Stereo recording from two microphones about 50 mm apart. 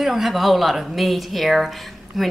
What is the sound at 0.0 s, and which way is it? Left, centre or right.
Speech, centre.